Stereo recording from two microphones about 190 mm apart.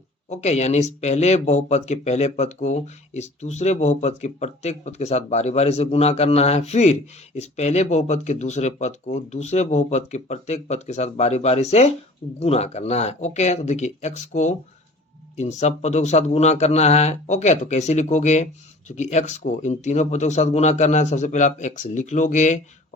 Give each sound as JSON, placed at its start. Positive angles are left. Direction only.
{"t": 0.3, "sound": "speech", "side_deg": 35}